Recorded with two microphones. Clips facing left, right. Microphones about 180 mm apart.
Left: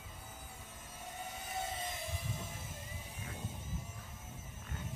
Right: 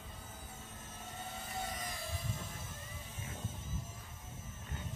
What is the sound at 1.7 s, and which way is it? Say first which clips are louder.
Music: left 2 dB; 25° left (ahead or behind).